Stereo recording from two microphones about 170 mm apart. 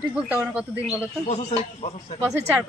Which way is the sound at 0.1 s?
5° right (ahead or behind).